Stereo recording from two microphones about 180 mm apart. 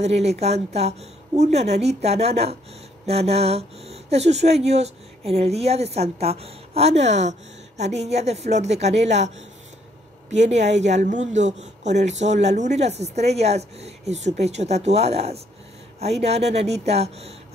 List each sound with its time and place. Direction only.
0.0 s speech: 35° right (ahead or behind)
10.3 s speech: 40° right (ahead or behind)